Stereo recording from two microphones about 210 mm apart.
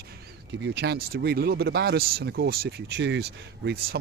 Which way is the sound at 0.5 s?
55° right (ahead or behind).